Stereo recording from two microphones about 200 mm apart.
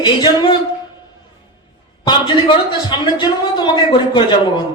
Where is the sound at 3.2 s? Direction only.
20° left (ahead or behind).